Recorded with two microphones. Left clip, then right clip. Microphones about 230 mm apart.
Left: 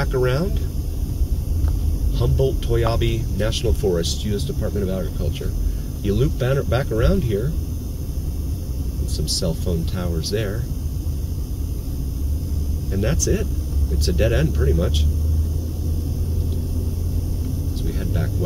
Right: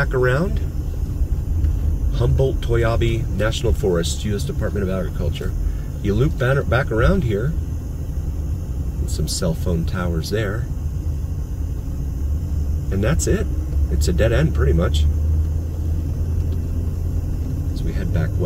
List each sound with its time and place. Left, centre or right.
0.0 s speech: centre
2.1 s speech: right
6.0 s speech: centre
9.1 s speech: right
13.0 s speech: centre